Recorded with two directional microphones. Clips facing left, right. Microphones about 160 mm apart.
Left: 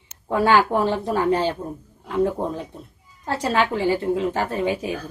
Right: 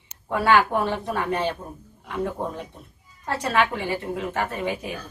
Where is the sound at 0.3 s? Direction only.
30° left (ahead or behind).